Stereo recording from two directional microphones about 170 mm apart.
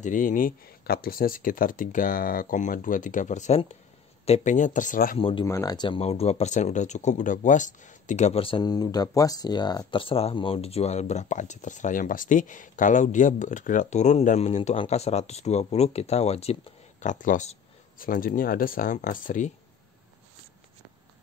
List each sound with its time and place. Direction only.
0.0 s speech: 50° left (ahead or behind)
5.4 s speech: 15° left (ahead or behind)
5.9 s speech: 35° left (ahead or behind)